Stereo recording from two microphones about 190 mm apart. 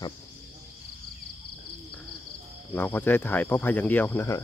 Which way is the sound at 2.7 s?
10° left (ahead or behind).